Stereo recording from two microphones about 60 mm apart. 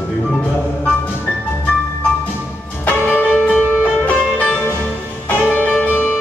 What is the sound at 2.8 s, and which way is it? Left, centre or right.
Music, left.